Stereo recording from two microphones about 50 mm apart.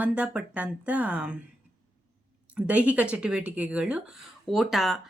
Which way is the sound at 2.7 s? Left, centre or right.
Right.